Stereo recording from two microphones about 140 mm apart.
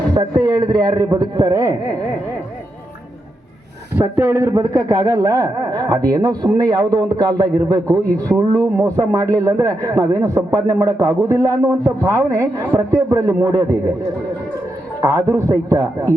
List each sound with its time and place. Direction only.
0.1 s a man's voice: 30° right (ahead or behind)
3.9 s a man's voice: 15° right (ahead or behind)
15.0 s a man's voice: 20° right (ahead or behind)